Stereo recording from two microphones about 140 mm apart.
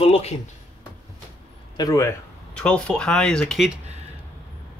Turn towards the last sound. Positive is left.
turn(degrees=5)  # may be behind; listen again after turning